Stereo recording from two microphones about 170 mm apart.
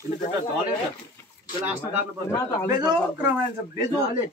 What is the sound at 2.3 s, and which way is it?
Speech, 20° left (ahead or behind).